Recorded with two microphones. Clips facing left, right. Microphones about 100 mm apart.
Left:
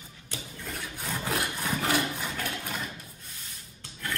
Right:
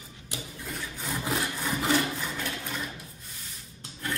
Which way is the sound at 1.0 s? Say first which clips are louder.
Right 1 dB; 5° right (ahead or behind).